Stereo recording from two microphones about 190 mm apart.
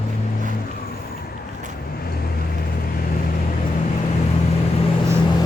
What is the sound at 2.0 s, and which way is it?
Vehicle, 50° left (ahead or behind).